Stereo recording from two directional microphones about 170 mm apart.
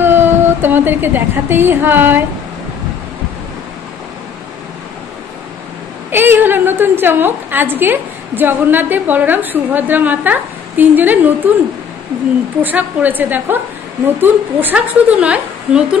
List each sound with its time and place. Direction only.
0.0 s a woman's voice: 10° right (ahead or behind)
6.1 s a woman's voice: 10° right (ahead or behind)
12.6 s a woman's voice: 10° right (ahead or behind)